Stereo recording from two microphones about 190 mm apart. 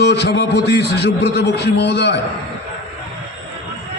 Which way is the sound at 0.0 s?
65° left (ahead or behind).